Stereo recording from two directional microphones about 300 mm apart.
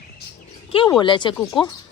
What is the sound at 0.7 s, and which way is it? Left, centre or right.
Speech, centre.